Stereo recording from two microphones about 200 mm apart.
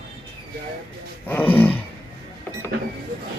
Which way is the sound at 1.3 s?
10° left (ahead or behind).